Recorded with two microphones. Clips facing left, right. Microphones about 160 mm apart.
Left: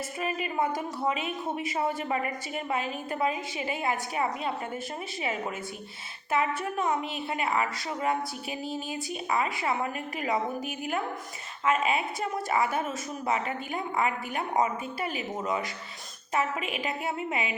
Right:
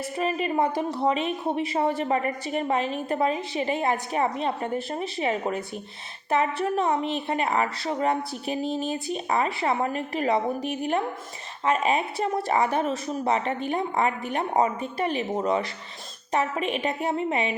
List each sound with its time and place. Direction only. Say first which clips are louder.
0.2 s a woman's voice: right 5 dB; 35° right (ahead or behind)
8.6 s speech: right 6 dB; 5° left (ahead or behind)
9.1 s a woman's voice: right 2 dB; 35° right (ahead or behind)